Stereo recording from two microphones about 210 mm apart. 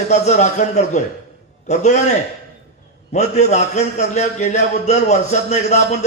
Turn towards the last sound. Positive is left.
turn(degrees=30)  # may be behind; listen again after turning